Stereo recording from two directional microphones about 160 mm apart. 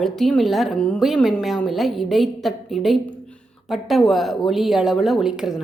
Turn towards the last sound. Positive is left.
turn(degrees=-5)  # may be behind; listen again after turning